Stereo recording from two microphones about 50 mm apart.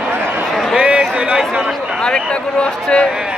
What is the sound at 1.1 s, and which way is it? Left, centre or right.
Chatter, right.